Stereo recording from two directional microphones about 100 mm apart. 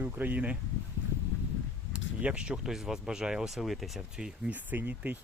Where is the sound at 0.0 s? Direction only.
15° right (ahead or behind).